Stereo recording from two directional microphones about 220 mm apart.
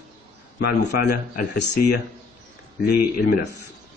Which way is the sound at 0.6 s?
45° left (ahead or behind).